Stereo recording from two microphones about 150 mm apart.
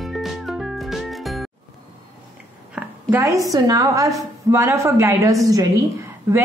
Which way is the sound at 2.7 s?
15° right (ahead or behind).